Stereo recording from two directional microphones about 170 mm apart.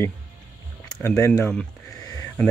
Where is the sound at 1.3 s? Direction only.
5° left (ahead or behind).